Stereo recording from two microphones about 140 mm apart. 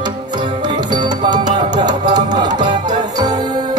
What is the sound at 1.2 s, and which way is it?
Music, 35° right (ahead or behind).